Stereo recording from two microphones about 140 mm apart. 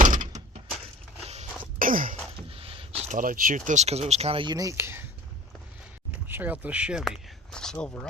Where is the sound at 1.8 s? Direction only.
75° right (ahead or behind).